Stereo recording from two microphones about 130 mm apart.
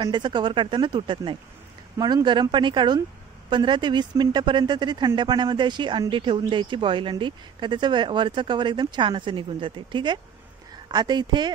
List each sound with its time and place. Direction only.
0.0 s speech: 35° right (ahead or behind)